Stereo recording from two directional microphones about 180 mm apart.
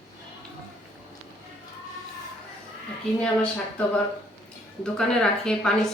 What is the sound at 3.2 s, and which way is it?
Speech, 5° left (ahead or behind).